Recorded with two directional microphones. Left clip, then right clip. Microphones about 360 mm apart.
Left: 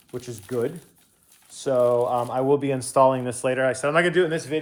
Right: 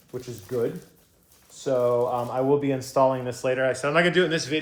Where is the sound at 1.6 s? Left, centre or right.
Left.